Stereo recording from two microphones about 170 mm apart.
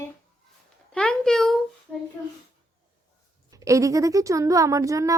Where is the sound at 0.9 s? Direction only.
5° left (ahead or behind).